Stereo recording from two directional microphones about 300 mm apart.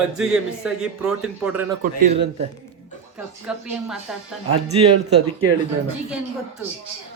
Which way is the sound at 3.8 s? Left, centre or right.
Centre.